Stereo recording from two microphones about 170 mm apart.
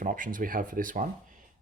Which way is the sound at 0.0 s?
50° right (ahead or behind).